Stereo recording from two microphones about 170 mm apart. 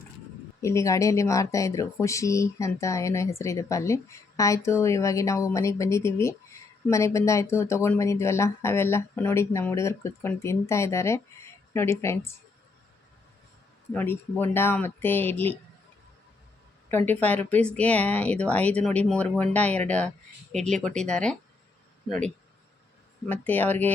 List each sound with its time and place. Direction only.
0.6 s speech: 15° left (ahead or behind)
13.9 s speech: 10° left (ahead or behind)
16.9 s speech: 10° left (ahead or behind)
23.2 s speech: 10° left (ahead or behind)